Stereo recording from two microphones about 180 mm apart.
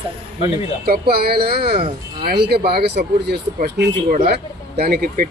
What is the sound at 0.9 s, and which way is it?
Speech, 60° right (ahead or behind).